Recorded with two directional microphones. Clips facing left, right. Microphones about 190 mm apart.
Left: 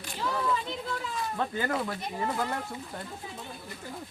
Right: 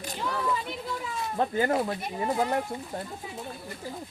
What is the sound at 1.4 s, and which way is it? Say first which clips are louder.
Speech: right 6 dB; 30° right (ahead or behind).